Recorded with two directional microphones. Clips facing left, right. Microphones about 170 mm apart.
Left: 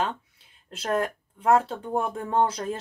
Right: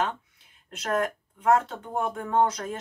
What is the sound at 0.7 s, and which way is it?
Speech, 30° left (ahead or behind).